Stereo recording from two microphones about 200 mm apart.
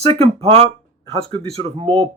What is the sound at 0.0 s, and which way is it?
Speech, 30° right (ahead or behind).